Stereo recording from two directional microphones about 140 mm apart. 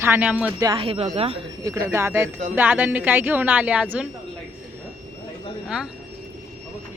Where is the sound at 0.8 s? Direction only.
45° right (ahead or behind).